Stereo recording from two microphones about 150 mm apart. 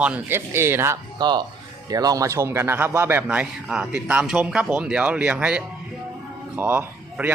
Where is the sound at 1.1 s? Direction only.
30° right (ahead or behind).